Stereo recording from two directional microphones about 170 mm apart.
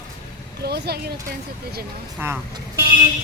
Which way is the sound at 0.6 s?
70° right (ahead or behind).